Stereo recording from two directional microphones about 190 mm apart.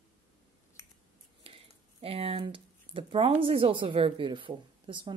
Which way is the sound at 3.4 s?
30° right (ahead or behind).